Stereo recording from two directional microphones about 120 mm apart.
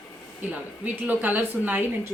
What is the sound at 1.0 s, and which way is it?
Speech, 15° right (ahead or behind).